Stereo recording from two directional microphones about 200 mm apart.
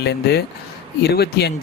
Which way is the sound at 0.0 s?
55° left (ahead or behind).